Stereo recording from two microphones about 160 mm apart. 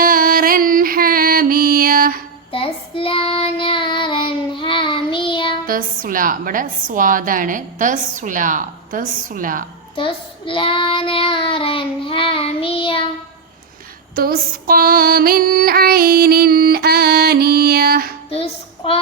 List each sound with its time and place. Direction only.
0.0 s music: 60° right (ahead or behind)
2.5 s child singing: 35° left (ahead or behind)
5.6 s a woman's voice: 60° right (ahead or behind)
10.0 s child singing: 35° left (ahead or behind)
14.2 s female singing: 65° right (ahead or behind)
18.3 s child singing: 35° left (ahead or behind)